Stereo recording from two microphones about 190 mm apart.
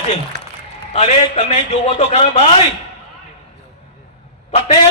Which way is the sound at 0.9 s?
40° left (ahead or behind).